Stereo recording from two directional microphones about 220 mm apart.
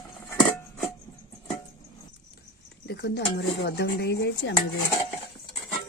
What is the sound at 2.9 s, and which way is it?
Speech, 50° left (ahead or behind).